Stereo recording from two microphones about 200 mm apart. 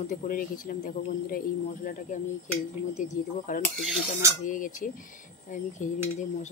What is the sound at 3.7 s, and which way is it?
Filing, centre (ahead or behind).